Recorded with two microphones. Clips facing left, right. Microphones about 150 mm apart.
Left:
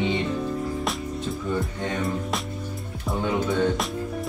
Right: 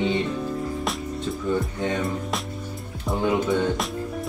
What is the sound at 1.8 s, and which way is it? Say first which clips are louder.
Speech: right 1 dB; centre (ahead or behind).